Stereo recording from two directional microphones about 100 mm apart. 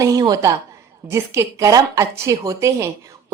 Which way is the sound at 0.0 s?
35° right (ahead or behind).